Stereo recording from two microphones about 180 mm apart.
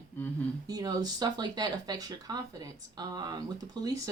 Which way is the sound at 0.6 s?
20° right (ahead or behind).